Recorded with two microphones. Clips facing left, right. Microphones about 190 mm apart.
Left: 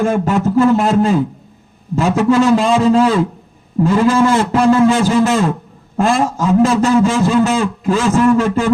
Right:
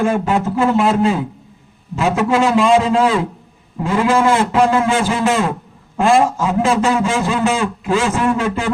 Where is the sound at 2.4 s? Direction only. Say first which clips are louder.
Left 1 dB; 45° left (ahead or behind).